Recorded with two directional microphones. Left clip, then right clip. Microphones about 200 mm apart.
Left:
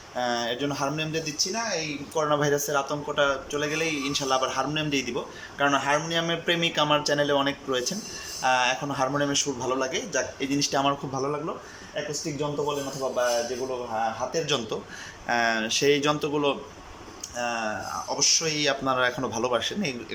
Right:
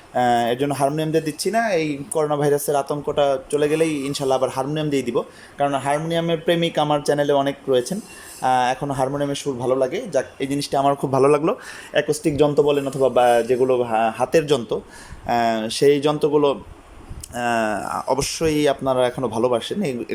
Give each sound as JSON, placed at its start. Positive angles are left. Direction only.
{"t": 0.2, "sound": "speech", "side_deg": -30}
{"t": 2.2, "sound": "speech", "side_deg": -25}
{"t": 11.1, "sound": "speech", "side_deg": -45}
{"t": 14.4, "sound": "speech", "side_deg": -30}
{"t": 17.3, "sound": "speech", "side_deg": -40}